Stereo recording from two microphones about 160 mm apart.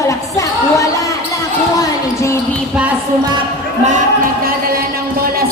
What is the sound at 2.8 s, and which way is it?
Speech, 5° right (ahead or behind).